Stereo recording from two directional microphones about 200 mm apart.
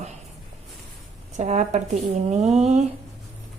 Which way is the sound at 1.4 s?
35° right (ahead or behind).